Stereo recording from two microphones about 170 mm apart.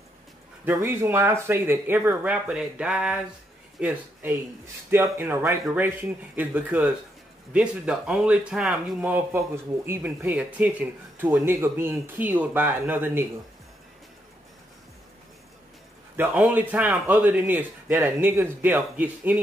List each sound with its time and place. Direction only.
0.7 s a man's voice: 15° right (ahead or behind)
16.2 s a man's voice: 10° right (ahead or behind)